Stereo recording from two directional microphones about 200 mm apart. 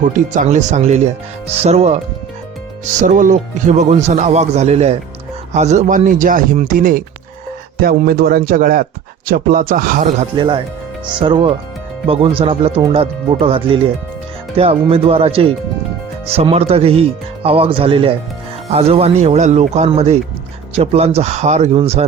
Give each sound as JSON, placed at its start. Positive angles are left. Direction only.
{"t": 0.0, "sound": "speech", "side_deg": -40}
{"t": 3.0, "sound": "a man's voice", "side_deg": -40}
{"t": 10.3, "sound": "speech", "side_deg": -25}